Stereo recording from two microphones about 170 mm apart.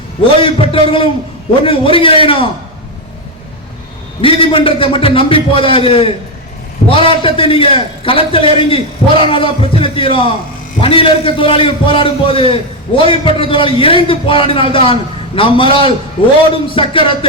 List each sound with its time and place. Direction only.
0.4 s a man's voice: 30° left (ahead or behind)
4.2 s a man's voice: 30° left (ahead or behind)